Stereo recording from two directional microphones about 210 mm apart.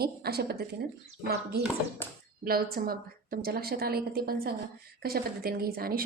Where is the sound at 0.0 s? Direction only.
50° right (ahead or behind).